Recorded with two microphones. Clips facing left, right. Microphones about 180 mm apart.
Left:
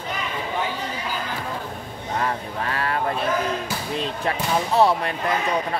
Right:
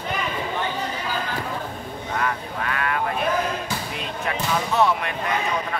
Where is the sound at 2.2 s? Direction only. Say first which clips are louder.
Left 1 dB; 30° left (ahead or behind).